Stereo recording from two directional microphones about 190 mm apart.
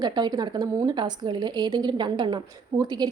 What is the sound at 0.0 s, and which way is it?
Speech, 20° right (ahead or behind).